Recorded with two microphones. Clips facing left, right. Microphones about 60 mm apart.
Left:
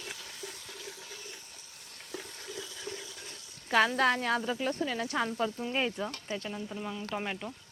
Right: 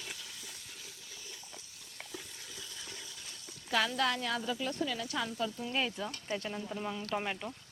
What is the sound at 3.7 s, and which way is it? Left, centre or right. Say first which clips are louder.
Speech: left 5 dB; left.